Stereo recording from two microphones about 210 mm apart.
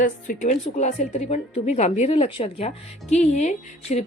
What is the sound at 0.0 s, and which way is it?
A woman's voice, 35° left (ahead or behind).